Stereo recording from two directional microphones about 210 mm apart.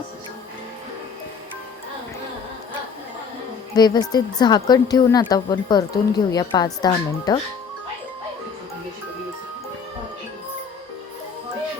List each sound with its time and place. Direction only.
3.8 s a woman's voice: 20° left (ahead or behind)